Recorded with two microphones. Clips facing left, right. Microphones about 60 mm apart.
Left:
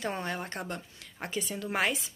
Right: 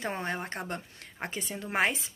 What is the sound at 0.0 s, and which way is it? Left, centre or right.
A woman's voice, right.